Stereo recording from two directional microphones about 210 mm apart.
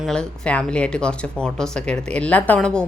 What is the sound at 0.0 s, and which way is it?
A woman's voice, 5° left (ahead or behind).